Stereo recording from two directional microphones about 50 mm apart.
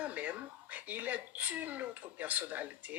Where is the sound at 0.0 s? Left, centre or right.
Right.